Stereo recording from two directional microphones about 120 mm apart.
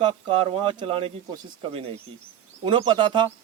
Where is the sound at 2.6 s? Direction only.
40° right (ahead or behind).